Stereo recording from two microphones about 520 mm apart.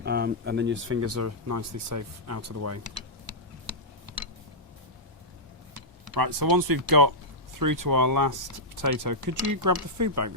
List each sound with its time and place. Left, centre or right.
0.0 s speech: centre
6.1 s speech: right